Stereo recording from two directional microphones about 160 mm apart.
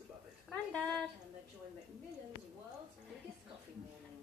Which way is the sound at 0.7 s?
5° left (ahead or behind).